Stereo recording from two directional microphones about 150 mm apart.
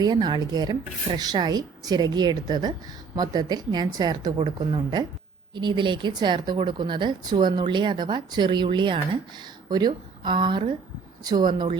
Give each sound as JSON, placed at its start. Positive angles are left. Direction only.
{"t": 0.0, "sound": "speech", "side_deg": -30}